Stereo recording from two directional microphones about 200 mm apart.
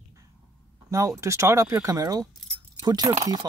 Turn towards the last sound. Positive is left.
turn(degrees=-15)  # may be behind; listen again after turning